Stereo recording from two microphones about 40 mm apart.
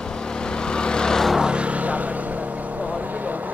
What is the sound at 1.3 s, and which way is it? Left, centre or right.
Vehicle, right.